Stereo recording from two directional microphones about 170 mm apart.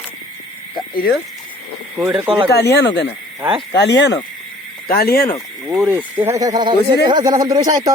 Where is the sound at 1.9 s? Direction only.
10° right (ahead or behind).